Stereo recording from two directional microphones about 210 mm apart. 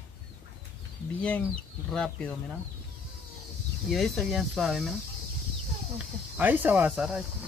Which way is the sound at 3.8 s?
Centre (ahead or behind).